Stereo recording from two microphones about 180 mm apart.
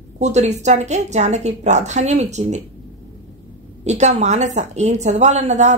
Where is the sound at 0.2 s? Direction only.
40° right (ahead or behind).